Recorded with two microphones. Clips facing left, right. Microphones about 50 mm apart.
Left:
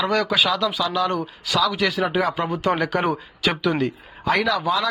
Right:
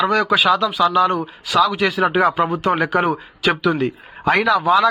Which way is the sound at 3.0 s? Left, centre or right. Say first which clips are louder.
Right 4 dB; centre.